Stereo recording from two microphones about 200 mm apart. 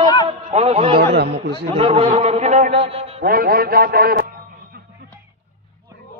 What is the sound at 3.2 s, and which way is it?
A man's voice, 45° right (ahead or behind).